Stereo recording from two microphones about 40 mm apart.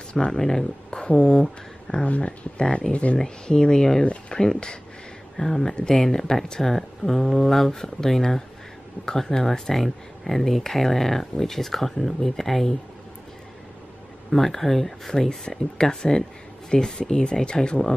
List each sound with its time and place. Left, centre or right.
0.1 s speech: left
0.4 s speech: centre
0.8 s speech: left
2.0 s speech: left
2.6 s speech: left
2.9 s speech: left
3.4 s speech: centre
14.3 s speech: centre
15.2 s speech: centre